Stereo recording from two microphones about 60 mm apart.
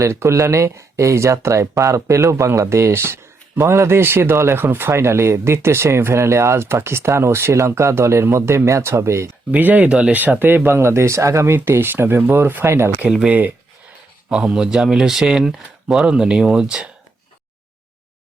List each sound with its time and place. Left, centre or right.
0.0 s speech: right
9.5 s speech: right
10.7 s speech: right
11.5 s speech: right
12.6 s speech: right
13.1 s speech: centre